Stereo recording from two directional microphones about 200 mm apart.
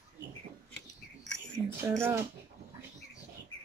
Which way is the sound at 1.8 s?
10° right (ahead or behind).